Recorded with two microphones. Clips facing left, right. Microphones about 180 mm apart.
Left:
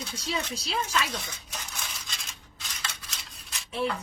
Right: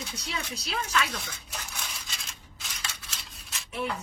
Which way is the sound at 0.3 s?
30° left (ahead or behind).